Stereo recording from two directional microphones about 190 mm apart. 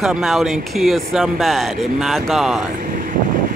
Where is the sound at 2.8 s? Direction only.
45° right (ahead or behind).